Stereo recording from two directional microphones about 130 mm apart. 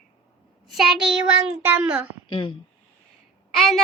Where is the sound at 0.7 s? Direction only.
Centre (ahead or behind).